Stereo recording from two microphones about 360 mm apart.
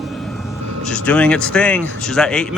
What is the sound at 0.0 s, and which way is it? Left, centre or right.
Vehicle, centre.